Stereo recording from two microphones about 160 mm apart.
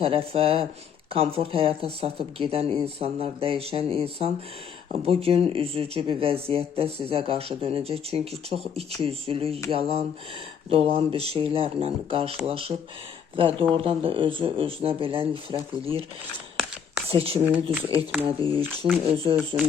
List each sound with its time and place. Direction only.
0.0 s speech: 35° right (ahead or behind)
17.1 s speech: 35° right (ahead or behind)
17.4 s speech: 10° right (ahead or behind)
17.8 s speech: 35° right (ahead or behind)